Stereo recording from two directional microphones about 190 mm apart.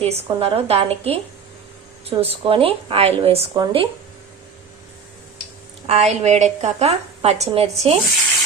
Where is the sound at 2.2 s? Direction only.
30° right (ahead or behind).